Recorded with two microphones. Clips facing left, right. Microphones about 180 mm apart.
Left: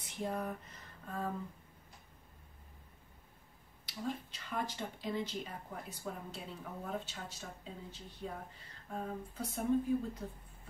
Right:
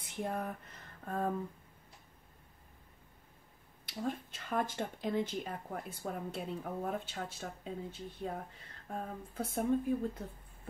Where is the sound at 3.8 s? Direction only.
50° right (ahead or behind).